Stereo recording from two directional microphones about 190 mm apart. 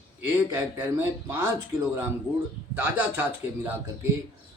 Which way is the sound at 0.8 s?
10° right (ahead or behind).